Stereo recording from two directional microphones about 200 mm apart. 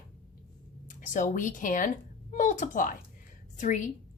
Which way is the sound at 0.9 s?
40° left (ahead or behind).